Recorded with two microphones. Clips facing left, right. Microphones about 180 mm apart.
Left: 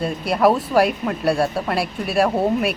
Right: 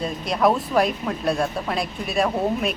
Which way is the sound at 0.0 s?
5° left (ahead or behind).